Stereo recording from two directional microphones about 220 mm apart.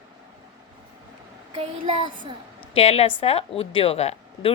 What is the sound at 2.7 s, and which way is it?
A woman's voice, 25° left (ahead or behind).